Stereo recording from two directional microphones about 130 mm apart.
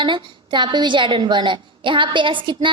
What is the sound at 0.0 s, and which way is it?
A woman's voice, 35° right (ahead or behind).